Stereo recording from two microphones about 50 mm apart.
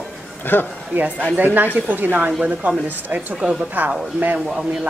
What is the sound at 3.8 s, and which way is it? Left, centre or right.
Speech, right.